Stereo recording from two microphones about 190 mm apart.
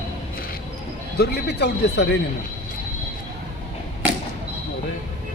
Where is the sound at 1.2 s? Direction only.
60° left (ahead or behind).